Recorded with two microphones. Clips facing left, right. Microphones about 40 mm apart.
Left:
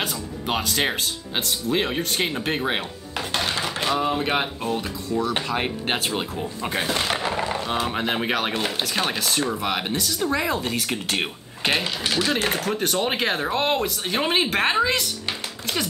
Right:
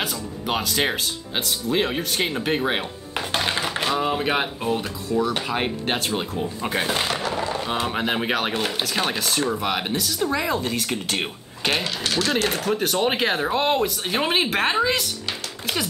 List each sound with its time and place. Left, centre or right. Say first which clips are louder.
0.0 s speech: even; centre
3.2 s music: right 1 dB; centre
3.8 s speech: left 1 dB; centre
5.9 s speech: even; centre
6.3 s speech: right 2 dB; centre
7.2 s a sound: even; left
7.6 s speech: even; centre
11.6 s speech: even; centre
12.5 s speech: right 1 dB; centre